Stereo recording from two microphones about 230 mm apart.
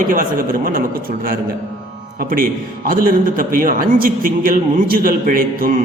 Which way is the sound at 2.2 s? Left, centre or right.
Right.